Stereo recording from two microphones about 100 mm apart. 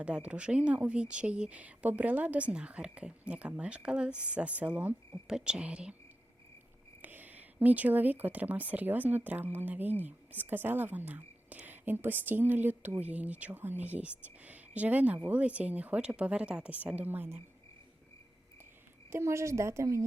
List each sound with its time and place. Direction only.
0.0 s speech: 10° right (ahead or behind)
7.0 s speech: 20° right (ahead or behind)
19.1 s a woman's voice: 30° right (ahead or behind)